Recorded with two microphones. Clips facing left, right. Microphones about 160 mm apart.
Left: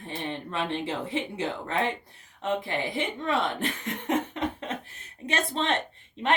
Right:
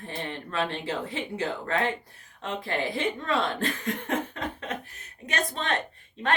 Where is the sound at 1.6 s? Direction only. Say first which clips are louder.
Right 1 dB; 20° left (ahead or behind).